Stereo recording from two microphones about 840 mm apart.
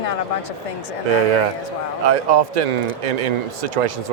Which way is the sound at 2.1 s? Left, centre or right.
Right.